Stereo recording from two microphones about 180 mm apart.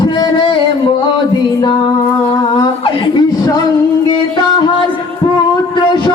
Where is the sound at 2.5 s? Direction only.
25° left (ahead or behind).